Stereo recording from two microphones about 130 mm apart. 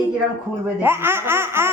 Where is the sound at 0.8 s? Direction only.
15° right (ahead or behind).